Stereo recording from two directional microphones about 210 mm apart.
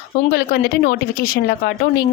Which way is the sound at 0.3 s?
45° left (ahead or behind).